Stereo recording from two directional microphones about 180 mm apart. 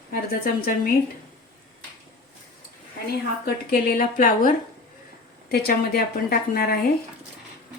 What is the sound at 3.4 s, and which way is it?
A woman's voice, 55° left (ahead or behind).